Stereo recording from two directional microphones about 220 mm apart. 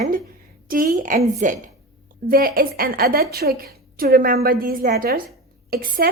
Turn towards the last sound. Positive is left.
turn(degrees=-40)  # may be behind; listen again after turning